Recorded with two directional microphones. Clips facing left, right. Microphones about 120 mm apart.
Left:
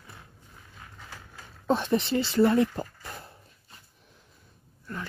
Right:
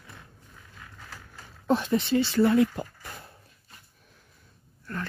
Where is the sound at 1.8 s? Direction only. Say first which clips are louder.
Right 1 dB; 25° left (ahead or behind).